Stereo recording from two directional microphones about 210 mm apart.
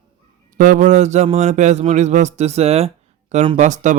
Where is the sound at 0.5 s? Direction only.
35° right (ahead or behind).